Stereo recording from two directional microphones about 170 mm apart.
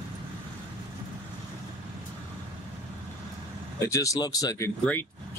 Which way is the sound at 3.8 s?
20° left (ahead or behind).